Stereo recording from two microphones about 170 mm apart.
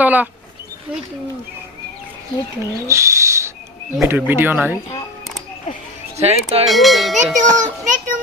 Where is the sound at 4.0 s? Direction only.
10° right (ahead or behind).